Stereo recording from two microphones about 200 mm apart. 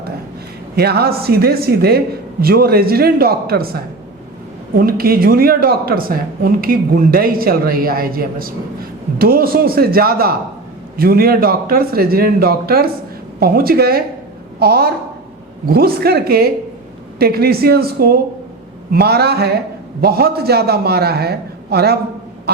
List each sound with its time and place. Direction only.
0.8 s speech: 50° right (ahead or behind)
4.8 s speech: 45° right (ahead or behind)